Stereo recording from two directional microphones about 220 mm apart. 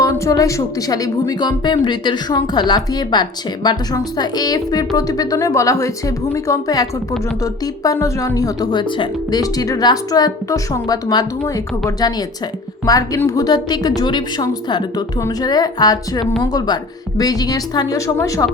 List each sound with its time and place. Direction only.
0.0 s speech: 15° left (ahead or behind)
12.8 s speech: 15° left (ahead or behind)